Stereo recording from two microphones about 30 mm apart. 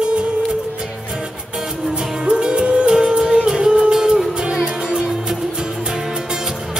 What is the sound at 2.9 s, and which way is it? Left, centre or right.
Music, right.